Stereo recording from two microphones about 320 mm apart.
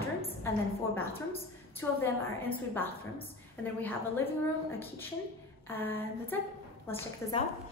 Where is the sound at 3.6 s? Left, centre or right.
Centre.